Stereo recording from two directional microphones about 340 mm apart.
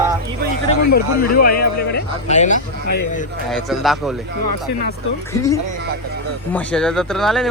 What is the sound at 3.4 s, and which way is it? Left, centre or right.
Speech, centre.